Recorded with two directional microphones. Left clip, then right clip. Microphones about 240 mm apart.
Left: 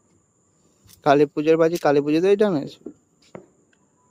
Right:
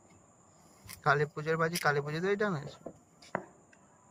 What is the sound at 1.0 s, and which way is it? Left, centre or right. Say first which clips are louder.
Speech: left 12 dB; left.